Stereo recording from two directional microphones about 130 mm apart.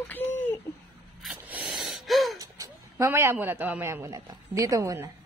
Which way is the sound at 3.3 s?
15° right (ahead or behind).